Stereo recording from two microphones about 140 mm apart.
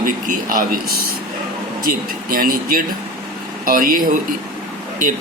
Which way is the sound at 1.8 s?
90° right.